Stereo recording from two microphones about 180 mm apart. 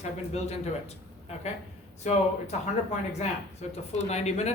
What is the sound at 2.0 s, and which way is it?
Speech, 40° left (ahead or behind).